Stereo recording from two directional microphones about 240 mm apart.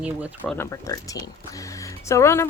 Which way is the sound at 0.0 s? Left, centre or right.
Centre.